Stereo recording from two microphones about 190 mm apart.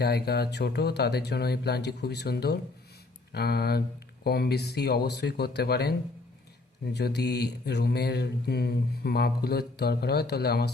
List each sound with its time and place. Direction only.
0.0 s mantra: 55° left (ahead or behind)